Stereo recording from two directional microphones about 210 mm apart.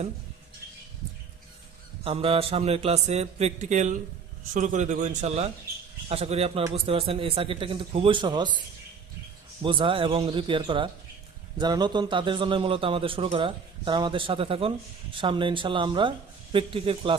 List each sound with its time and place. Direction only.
2.0 s a man's voice: 25° right (ahead or behind)
9.6 s a man's voice: 25° right (ahead or behind)